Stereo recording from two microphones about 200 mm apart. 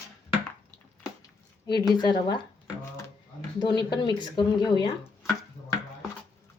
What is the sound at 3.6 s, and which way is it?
Speech, 20° left (ahead or behind).